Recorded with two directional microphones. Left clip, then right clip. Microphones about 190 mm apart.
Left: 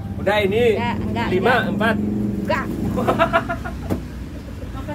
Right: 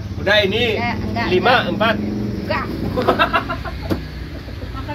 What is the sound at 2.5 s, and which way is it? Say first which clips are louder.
Speech: even; 60° left (ahead or behind).